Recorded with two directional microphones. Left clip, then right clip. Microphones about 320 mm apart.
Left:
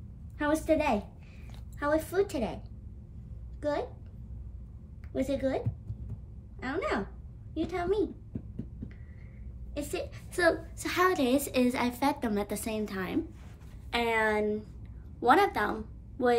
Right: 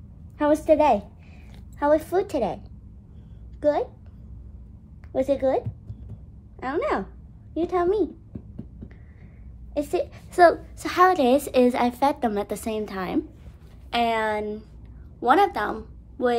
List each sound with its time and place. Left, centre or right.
0.4 s a woman's voice: right
5.1 s a woman's voice: right
6.6 s a woman's voice: right
9.8 s a woman's voice: centre